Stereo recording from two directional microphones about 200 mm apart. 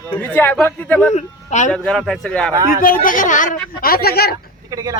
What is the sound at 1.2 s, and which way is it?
Speech, 35° left (ahead or behind).